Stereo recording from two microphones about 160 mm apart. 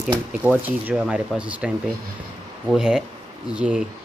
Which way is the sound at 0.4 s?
10° right (ahead or behind).